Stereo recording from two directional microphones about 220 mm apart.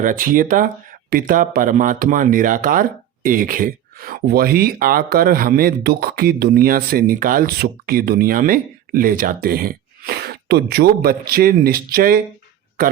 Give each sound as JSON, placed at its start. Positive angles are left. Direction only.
{"t": 0.0, "sound": "speech", "side_deg": -40}